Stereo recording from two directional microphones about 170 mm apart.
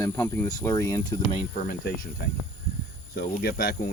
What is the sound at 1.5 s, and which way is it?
Speech, 55° left (ahead or behind).